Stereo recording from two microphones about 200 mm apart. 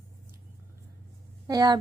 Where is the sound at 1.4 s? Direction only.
20° right (ahead or behind).